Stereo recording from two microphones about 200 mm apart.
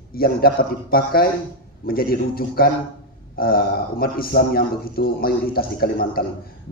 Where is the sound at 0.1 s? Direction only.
50° left (ahead or behind).